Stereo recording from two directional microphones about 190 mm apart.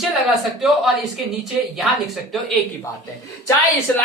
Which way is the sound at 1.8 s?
Centre (ahead or behind).